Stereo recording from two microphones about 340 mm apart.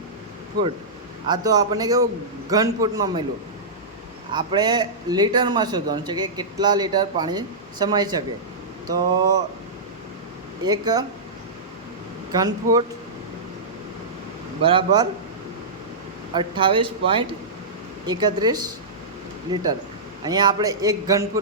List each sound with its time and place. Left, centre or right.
1.3 s a man's voice: centre
4.3 s a man's voice: centre
10.7 s a man's voice: centre
12.3 s a man's voice: centre
14.6 s a man's voice: centre
16.3 s a man's voice: centre
20.2 s a man's voice: centre